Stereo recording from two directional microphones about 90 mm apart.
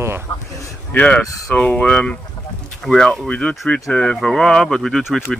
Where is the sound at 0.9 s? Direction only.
15° left (ahead or behind).